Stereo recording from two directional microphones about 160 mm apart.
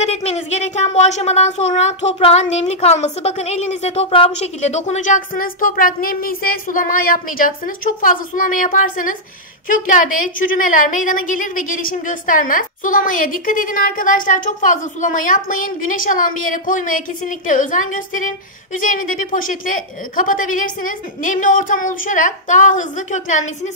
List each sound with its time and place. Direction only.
0.0 s a woman's voice: 45° left (ahead or behind)